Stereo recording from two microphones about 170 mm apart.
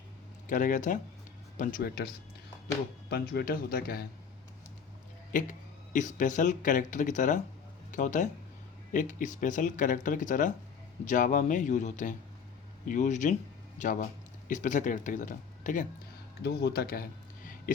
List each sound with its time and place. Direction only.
0.4 s speech: 50° left (ahead or behind)
3.1 s speech: 65° left (ahead or behind)
5.3 s speech: 50° left (ahead or behind)
16.4 s speech: 75° left (ahead or behind); by 17.7 s 55° left (ahead or behind)